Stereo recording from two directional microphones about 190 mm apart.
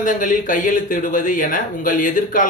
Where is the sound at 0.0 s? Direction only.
45° left (ahead or behind).